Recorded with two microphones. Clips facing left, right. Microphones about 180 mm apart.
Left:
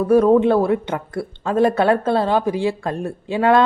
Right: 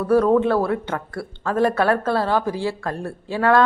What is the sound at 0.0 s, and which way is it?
Speech, 15° left (ahead or behind).